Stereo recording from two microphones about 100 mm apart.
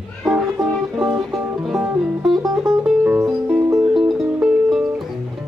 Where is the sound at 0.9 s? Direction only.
5° right (ahead or behind).